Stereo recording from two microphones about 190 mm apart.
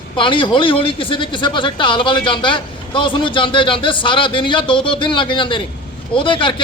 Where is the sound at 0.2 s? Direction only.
25° left (ahead or behind).